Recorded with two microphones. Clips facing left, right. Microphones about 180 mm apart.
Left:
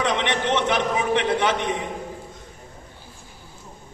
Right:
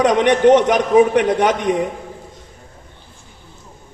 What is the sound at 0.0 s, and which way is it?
A woman's voice, 45° right (ahead or behind).